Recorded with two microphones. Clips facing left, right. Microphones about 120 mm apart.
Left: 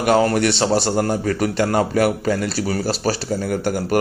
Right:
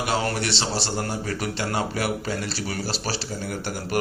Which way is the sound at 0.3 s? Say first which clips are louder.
Left 9 dB; 50° left (ahead or behind).